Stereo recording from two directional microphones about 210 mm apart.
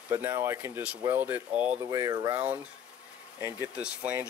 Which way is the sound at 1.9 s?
15° right (ahead or behind).